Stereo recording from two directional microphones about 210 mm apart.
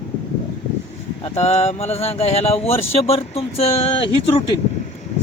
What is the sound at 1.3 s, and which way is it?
Speech, 30° left (ahead or behind).